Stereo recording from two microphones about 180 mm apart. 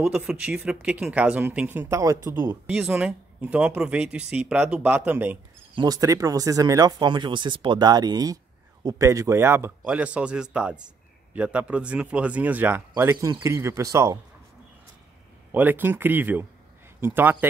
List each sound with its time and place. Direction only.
0.0 s speech: 5° right (ahead or behind)
5.8 s speech: 20° right (ahead or behind)
15.5 s speech: 10° right (ahead or behind)